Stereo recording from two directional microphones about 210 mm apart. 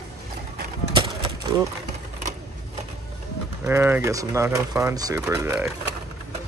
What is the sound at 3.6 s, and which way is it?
Speech, 10° right (ahead or behind).